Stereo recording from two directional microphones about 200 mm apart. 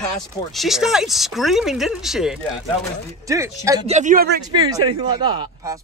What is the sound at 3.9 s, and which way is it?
Speech, 35° right (ahead or behind).